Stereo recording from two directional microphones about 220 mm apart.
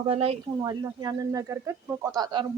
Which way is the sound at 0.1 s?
25° right (ahead or behind).